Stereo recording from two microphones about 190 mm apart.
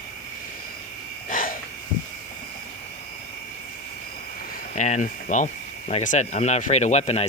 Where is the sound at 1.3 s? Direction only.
45° left (ahead or behind).